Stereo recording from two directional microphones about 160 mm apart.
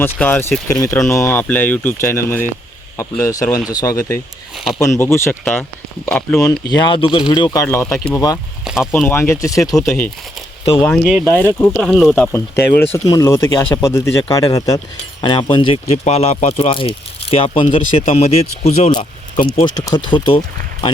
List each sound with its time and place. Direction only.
0.0 s speech: 10° left (ahead or behind)
0.7 s speech: 20° left (ahead or behind)
4.5 s speech: centre (ahead or behind)
4.8 s speech: 15° left (ahead or behind)
6.7 s speech: 25° left (ahead or behind)
7.6 s speech: 15° left (ahead or behind)
8.6 s a sound: 5° right (ahead or behind)
9.0 s speech: 15° left (ahead or behind)
10.8 s speech: centre (ahead or behind)
11.3 s speech: 10° left (ahead or behind)
11.7 s speech: centre (ahead or behind); by 18.9 s 40° left (ahead or behind)
19.6 s speech: 25° left (ahead or behind)